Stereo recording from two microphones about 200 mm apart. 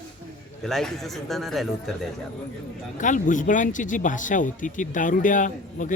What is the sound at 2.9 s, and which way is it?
Speech, 40° left (ahead or behind).